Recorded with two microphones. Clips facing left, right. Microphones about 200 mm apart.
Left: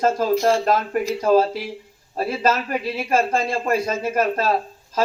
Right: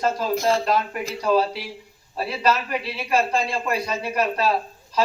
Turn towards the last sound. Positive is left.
turn(degrees=45)  # may be behind; listen again after turning